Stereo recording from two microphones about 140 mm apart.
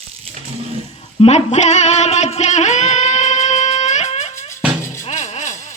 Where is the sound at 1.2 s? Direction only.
55° left (ahead or behind).